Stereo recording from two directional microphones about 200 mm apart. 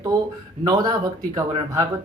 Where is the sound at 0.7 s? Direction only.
20° right (ahead or behind).